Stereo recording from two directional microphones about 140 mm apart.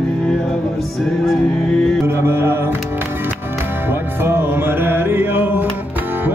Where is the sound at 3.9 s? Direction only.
15° right (ahead or behind).